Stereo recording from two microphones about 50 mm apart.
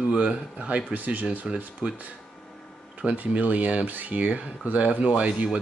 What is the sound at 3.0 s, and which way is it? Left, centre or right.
Speech, right.